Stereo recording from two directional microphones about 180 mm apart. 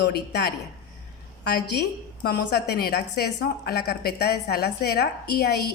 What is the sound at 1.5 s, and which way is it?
A woman's voice, 65° left (ahead or behind).